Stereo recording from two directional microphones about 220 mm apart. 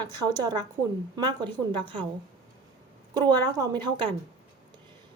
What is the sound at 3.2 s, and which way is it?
Speech, 20° right (ahead or behind).